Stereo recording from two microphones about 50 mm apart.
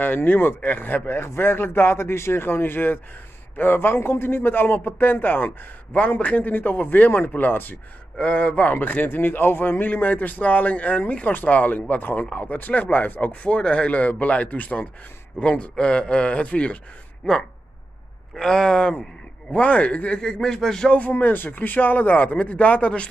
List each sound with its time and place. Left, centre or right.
0.0 s speech: left
5.9 s speech: left
8.2 s speech: left
8.7 s speech: left
18.3 s a man's voice: centre
19.5 s a man's voice: left; by 20.9 s centre
21.1 s speech: left